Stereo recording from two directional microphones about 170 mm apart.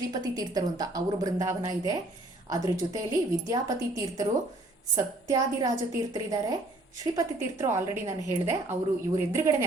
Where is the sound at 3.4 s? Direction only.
20° right (ahead or behind).